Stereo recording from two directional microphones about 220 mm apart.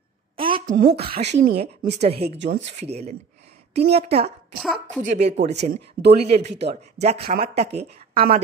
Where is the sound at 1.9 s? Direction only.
30° right (ahead or behind).